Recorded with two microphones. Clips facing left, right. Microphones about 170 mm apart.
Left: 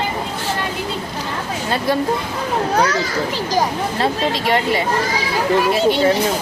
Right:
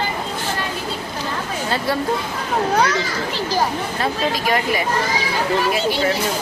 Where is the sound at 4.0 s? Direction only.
25° left (ahead or behind).